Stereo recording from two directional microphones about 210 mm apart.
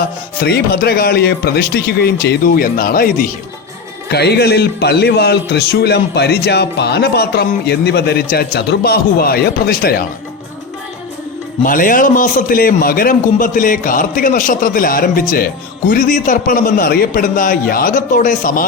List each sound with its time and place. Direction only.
0.3 s a man's voice: 45° left (ahead or behind)
11.6 s a man's voice: 40° left (ahead or behind)